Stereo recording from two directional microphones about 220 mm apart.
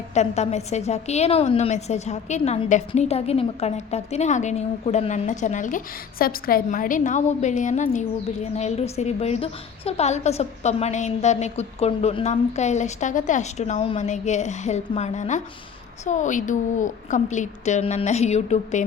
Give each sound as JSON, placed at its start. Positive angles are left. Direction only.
{"t": 0.1, "sound": "a woman's voice", "side_deg": 30}